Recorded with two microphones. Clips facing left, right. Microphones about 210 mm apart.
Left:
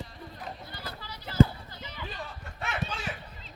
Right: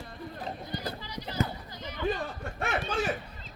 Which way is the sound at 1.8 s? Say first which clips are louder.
Right 10 dB; 50° right (ahead or behind).